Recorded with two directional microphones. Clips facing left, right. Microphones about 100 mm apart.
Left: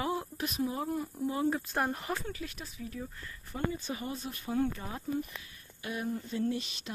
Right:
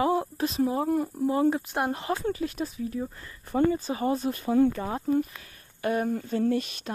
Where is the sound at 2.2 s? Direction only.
40° right (ahead or behind).